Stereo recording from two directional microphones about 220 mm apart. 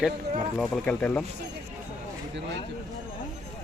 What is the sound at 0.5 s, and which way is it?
Speech, 5° left (ahead or behind).